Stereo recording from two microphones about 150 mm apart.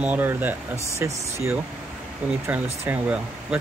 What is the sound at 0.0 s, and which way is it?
Speech, 10° right (ahead or behind).